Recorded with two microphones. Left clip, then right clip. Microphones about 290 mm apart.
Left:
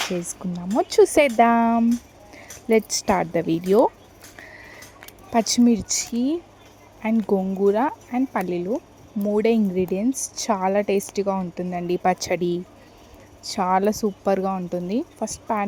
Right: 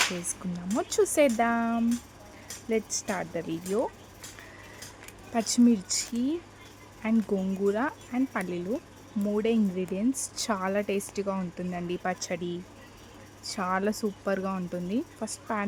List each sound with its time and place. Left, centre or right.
0.2 s speech: centre
5.3 s speech: centre